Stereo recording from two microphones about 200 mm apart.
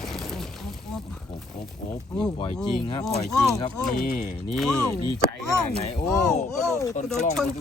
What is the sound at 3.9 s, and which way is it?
Speech, 45° left (ahead or behind).